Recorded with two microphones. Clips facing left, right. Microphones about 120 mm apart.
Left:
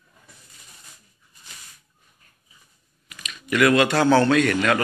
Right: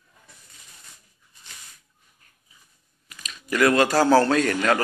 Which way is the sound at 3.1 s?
30° right (ahead or behind).